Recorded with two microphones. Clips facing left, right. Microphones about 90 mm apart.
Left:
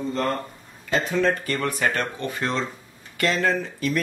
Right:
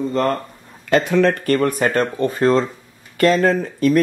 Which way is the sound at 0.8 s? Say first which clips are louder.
Right 7 dB; 65° right (ahead or behind).